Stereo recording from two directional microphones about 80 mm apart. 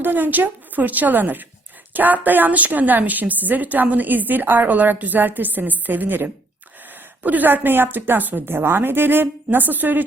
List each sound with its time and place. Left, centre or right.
0.0 s a woman's voice: right